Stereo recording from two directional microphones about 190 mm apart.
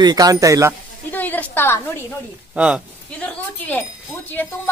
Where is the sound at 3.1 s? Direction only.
5° left (ahead or behind).